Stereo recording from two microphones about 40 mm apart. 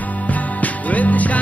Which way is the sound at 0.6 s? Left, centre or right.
Left.